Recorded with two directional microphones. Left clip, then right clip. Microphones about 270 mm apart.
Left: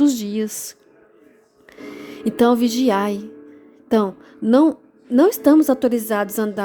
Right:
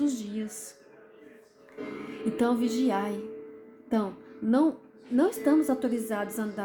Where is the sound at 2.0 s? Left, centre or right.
Left.